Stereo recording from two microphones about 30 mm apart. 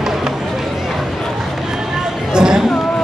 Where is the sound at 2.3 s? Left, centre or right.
Right.